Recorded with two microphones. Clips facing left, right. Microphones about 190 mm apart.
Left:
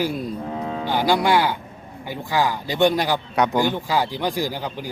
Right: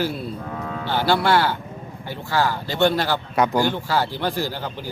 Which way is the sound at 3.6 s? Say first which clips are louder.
Even; 15° left (ahead or behind).